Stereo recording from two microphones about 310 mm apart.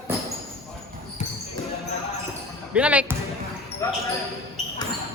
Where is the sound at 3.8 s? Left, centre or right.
Centre.